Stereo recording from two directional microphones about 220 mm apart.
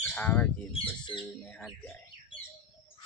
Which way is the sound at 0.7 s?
20° left (ahead or behind).